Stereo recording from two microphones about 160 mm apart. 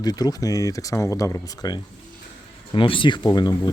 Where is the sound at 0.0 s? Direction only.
25° left (ahead or behind).